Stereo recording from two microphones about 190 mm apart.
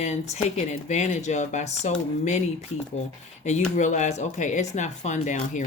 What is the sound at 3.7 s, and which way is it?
Speech, 40° left (ahead or behind).